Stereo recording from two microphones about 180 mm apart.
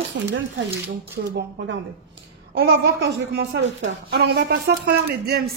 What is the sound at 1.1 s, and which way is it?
A woman's voice, 65° right (ahead or behind).